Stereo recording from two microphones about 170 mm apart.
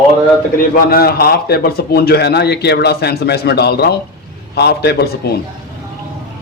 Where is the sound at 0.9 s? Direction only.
65° left (ahead or behind).